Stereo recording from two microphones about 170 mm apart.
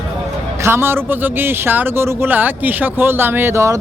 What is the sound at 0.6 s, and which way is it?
Speech, 15° right (ahead or behind).